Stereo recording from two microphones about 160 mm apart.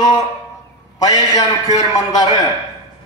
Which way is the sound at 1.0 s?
25° left (ahead or behind).